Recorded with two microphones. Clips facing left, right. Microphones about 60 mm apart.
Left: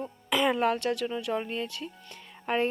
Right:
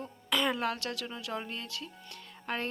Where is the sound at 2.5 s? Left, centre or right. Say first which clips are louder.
Left 8 dB; centre.